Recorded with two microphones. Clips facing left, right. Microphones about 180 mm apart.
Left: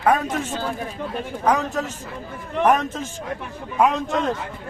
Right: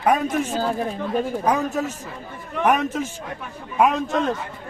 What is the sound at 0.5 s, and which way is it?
Speech, 40° right (ahead or behind).